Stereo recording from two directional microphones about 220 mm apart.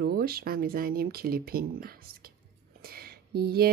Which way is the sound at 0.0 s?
45° right (ahead or behind).